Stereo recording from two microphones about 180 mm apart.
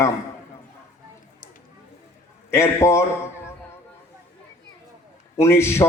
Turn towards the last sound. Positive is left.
turn(degrees=15)  # may be behind; listen again after turning